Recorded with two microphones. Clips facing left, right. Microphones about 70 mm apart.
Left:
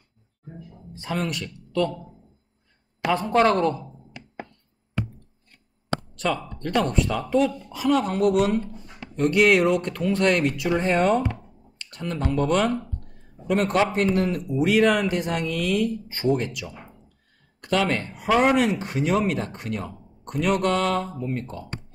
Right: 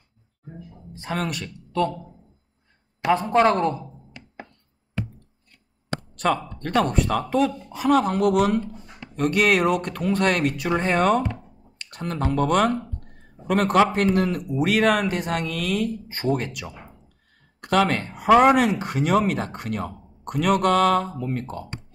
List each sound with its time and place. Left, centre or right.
1.1 s speech: right
3.1 s speech: right
6.1 s speech: right
10.9 s speech: right